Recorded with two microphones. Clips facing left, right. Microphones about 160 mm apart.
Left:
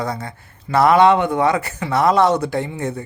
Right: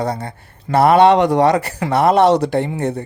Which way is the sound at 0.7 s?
60° right (ahead or behind).